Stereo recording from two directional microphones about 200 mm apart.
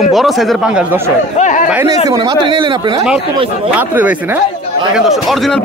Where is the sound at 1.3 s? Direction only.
40° left (ahead or behind).